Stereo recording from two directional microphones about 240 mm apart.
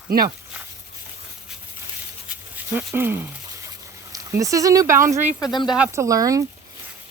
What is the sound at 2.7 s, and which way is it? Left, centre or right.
Speech, centre.